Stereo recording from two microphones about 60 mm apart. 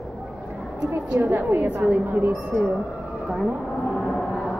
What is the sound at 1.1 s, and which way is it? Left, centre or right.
A woman's voice, right.